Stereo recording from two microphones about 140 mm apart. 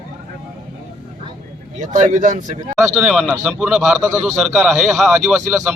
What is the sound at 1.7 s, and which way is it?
Speech, 60° right (ahead or behind).